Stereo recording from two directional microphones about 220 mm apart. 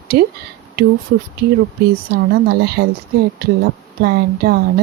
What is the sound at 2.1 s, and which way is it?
Speech, 45° right (ahead or behind).